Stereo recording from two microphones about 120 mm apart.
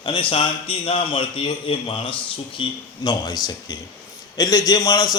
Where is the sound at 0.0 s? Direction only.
45° left (ahead or behind).